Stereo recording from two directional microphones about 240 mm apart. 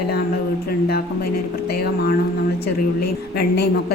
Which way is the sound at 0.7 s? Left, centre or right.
Left.